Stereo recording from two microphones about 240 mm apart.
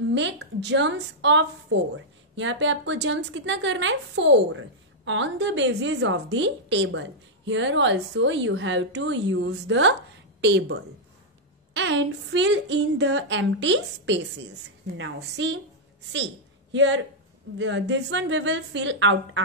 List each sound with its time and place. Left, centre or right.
0.0 s a woman's voice: right
16.7 s a woman's voice: right